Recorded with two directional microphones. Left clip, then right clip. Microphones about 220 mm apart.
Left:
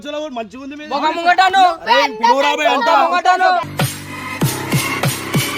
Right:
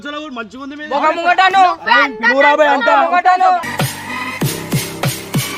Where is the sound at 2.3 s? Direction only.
40° left (ahead or behind).